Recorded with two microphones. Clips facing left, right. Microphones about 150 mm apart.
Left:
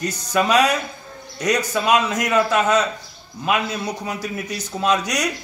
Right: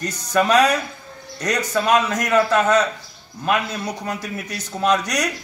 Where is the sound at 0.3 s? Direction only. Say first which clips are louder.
Right 1 dB; 5° left (ahead or behind).